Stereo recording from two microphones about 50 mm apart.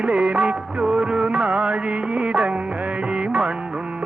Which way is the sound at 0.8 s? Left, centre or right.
Centre.